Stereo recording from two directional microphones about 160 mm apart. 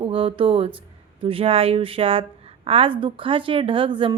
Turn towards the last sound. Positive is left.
turn(degrees=-30)  # may be behind; listen again after turning